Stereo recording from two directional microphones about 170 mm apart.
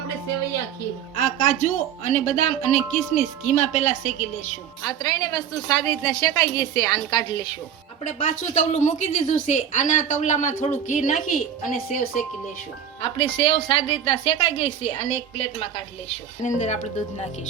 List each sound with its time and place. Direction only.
1.2 s speech: 45° left (ahead or behind)
4.8 s a woman's voice: 25° left (ahead or behind)
8.0 s speech: 45° left (ahead or behind)
13.0 s a woman's voice: 30° left (ahead or behind)
16.4 s speech: 45° left (ahead or behind)